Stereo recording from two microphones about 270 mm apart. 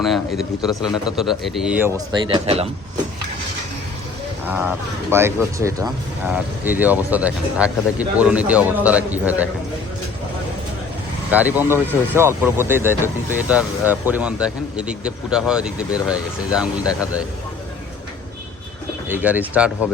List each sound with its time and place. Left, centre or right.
0.0 s speech: centre
2.2 s speech: centre
4.4 s speech: centre
11.3 s speech: centre
19.0 s speech: centre